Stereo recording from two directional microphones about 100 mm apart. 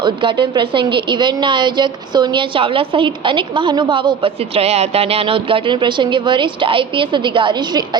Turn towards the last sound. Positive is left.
turn(degrees=-50)  # may be behind; listen again after turning